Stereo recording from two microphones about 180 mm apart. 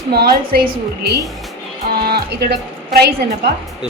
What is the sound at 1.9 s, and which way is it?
Music, 60° right (ahead or behind).